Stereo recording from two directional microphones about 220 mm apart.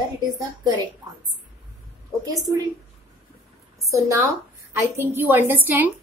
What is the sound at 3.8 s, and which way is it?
A woman's voice, 15° right (ahead or behind).